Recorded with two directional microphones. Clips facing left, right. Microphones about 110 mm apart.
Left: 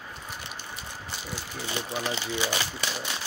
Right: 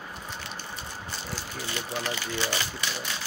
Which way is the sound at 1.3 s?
15° left (ahead or behind).